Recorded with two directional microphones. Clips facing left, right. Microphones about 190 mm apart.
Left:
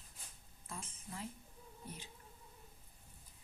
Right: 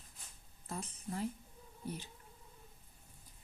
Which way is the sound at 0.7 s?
40° right (ahead or behind).